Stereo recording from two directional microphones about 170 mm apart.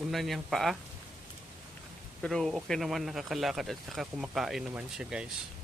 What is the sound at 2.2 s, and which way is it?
Speech, centre (ahead or behind).